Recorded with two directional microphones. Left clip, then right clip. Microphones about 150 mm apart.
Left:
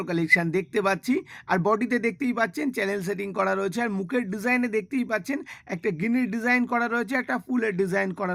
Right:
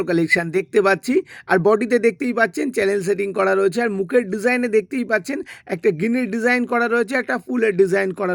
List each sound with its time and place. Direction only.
0.0 s speech: 25° right (ahead or behind)